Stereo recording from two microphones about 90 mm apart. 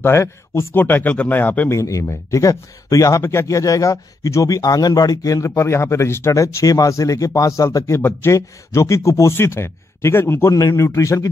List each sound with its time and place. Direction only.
0.0 s speech: 30° left (ahead or behind)
0.8 s a man's voice: 20° left (ahead or behind)
1.8 s speech: 35° left (ahead or behind)